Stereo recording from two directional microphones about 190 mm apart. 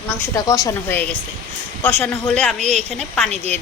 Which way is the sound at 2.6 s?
35° right (ahead or behind).